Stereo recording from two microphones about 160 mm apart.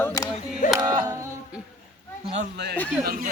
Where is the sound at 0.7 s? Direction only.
25° right (ahead or behind).